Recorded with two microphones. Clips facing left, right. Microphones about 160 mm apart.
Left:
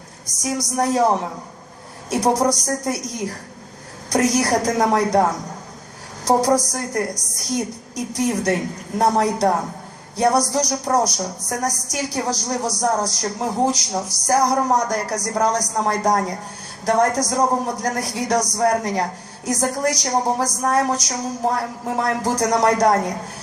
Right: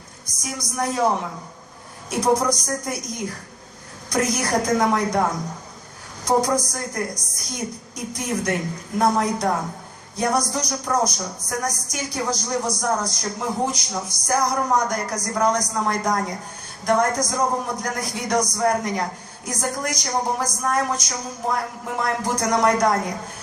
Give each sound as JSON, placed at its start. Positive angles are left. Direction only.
{"t": 0.3, "sound": "a sound", "side_deg": 40}
{"t": 0.8, "sound": "a woman's voice", "side_deg": 40}
{"t": 6.2, "sound": "a woman's voice", "side_deg": 35}